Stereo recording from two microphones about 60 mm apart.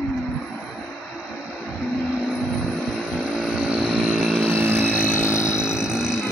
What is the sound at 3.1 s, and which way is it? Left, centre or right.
Chainsaw, centre.